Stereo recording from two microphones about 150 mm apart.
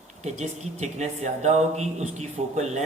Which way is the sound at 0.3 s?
50° right (ahead or behind).